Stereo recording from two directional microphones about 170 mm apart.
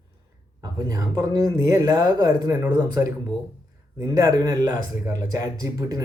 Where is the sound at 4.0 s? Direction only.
15° right (ahead or behind).